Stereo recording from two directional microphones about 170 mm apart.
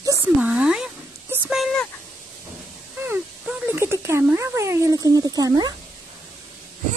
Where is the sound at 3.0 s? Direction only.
10° right (ahead or behind).